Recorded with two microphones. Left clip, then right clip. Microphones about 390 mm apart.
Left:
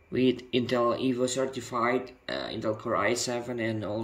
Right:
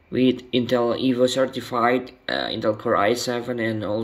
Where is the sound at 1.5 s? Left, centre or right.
Centre.